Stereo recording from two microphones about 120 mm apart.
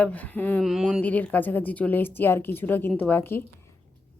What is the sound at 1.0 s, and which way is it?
A woman's voice, 10° left (ahead or behind).